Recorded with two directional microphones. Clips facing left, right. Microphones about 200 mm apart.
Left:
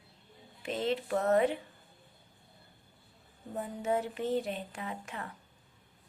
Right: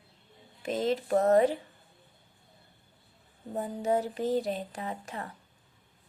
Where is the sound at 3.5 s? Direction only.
35° right (ahead or behind).